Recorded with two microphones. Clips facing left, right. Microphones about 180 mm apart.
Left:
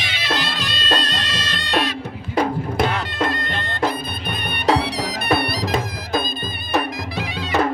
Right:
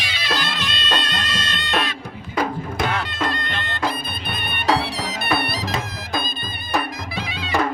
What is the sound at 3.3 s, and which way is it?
Bagpipes, 45° left (ahead or behind).